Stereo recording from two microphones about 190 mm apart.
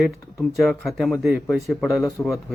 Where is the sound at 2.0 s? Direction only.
15° left (ahead or behind).